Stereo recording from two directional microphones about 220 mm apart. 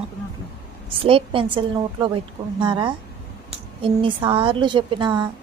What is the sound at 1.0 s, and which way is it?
A woman's voice, 25° right (ahead or behind).